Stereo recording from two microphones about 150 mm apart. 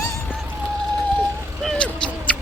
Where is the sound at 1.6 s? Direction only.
5° left (ahead or behind).